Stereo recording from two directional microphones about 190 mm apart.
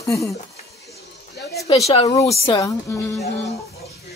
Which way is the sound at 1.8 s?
30° left (ahead or behind).